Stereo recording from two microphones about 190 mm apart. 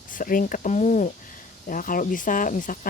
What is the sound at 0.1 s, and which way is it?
Speech, 45° left (ahead or behind).